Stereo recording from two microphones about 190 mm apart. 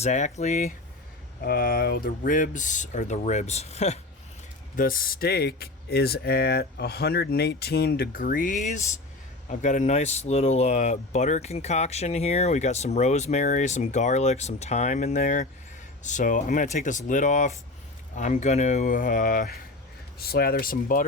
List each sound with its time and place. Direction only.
0.0 s speech: 35° left (ahead or behind)
1.4 s speech: 55° left (ahead or behind); by 4.0 s 35° left (ahead or behind)
4.8 s speech: 50° left (ahead or behind)